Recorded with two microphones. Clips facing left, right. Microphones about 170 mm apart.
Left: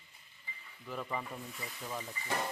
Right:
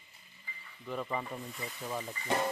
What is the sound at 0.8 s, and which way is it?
Speech, centre (ahead or behind).